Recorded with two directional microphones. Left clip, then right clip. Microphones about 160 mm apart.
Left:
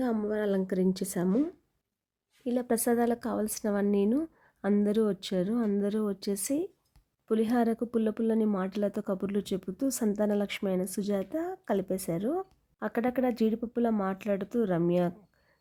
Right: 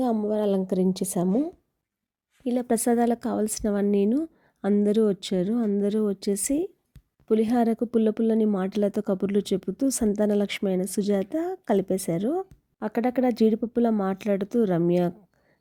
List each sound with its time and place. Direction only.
0.2 s speech: 20° right (ahead or behind)
2.4 s speech: 25° right (ahead or behind)